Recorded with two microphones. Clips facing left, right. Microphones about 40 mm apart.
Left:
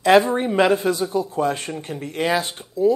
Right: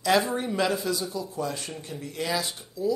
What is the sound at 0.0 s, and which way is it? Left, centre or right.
Speech, left.